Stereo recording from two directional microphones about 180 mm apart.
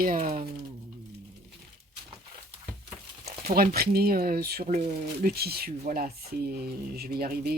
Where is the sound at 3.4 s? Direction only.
55° right (ahead or behind).